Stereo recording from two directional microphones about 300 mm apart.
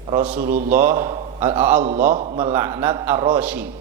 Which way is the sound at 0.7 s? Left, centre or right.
Centre.